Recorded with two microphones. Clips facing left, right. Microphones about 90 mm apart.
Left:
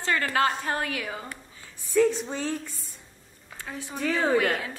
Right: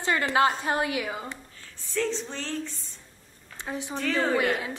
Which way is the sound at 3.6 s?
20° right (ahead or behind).